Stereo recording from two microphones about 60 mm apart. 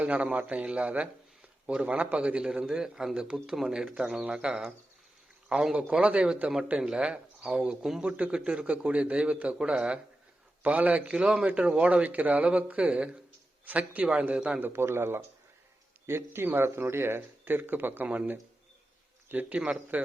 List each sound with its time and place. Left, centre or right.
0.0 s a man's voice: right; by 5.7 s centre
5.7 s speech: centre
8.0 s speech: right
11.1 s speech: centre
14.6 s a man's voice: right